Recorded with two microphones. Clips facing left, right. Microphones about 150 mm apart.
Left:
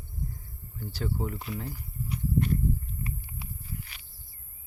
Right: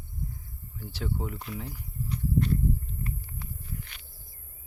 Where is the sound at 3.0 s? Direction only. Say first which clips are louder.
Right 1 dB; 5° left (ahead or behind).